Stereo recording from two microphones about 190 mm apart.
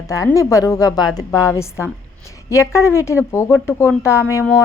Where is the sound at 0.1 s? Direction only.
15° left (ahead or behind).